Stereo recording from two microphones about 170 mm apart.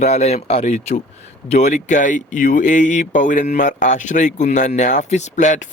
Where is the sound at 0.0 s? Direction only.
40° left (ahead or behind).